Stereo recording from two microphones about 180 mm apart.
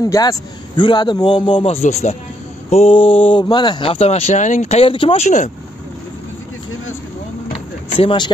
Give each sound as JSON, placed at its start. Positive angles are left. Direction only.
{"t": 0.0, "sound": "a man's voice", "side_deg": 20}
{"t": 7.5, "sound": "vehicle", "side_deg": 30}